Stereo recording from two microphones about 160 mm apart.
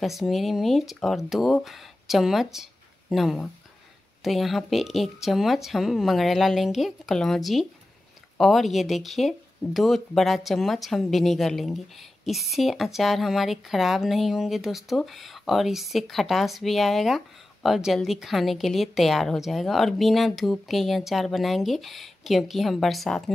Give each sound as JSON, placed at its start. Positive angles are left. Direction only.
{"t": 0.0, "sound": "speech", "side_deg": 0}